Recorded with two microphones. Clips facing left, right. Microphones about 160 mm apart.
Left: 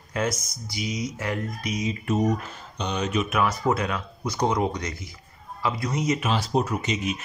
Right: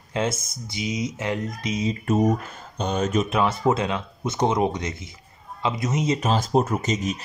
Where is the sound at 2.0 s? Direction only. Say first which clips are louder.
Right 3 dB; 50° right (ahead or behind).